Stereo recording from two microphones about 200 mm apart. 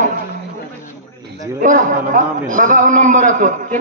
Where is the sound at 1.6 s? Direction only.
40° right (ahead or behind).